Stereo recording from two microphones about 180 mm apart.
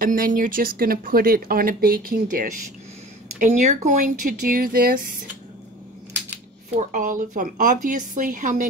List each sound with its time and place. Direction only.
0.0 s speech: 50° right (ahead or behind)
6.9 s speech: 50° right (ahead or behind)